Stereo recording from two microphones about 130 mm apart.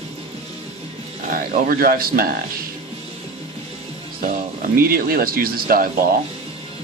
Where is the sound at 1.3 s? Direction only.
90° right.